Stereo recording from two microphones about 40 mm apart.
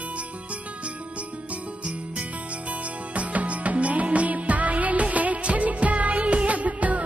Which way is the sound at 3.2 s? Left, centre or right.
Right.